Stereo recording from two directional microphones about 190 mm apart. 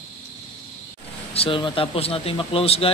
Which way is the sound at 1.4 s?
25° left (ahead or behind).